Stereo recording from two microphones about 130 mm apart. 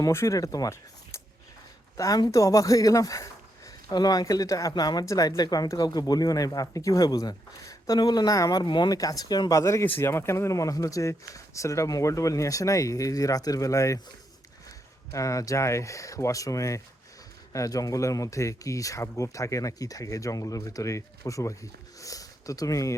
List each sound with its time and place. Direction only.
0.0 s speech: 20° left (ahead or behind)
15.1 s speech: 25° left (ahead or behind)